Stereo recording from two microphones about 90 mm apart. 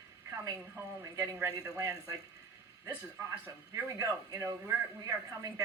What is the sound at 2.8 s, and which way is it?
Speech, 30° right (ahead or behind).